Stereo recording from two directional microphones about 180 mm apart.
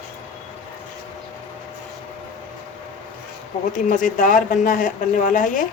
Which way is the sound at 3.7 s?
45° left (ahead or behind).